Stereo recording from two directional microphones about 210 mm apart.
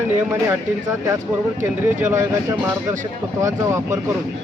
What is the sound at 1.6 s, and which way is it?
Speech, 10° right (ahead or behind).